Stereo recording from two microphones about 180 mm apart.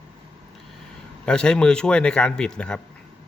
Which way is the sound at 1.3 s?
5° left (ahead or behind).